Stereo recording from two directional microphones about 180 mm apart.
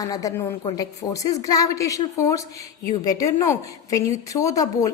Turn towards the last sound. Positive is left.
turn(degrees=20)  # may be behind; listen again after turning